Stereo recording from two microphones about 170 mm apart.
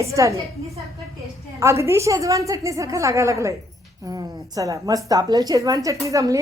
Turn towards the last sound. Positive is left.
turn(degrees=-20)  # may be behind; listen again after turning